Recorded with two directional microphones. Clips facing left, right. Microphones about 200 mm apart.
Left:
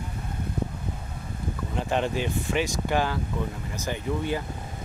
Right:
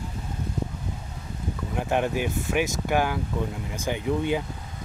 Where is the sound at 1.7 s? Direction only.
10° right (ahead or behind).